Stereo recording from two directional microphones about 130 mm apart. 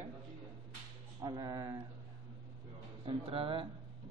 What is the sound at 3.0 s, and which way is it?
Speech, 45° right (ahead or behind).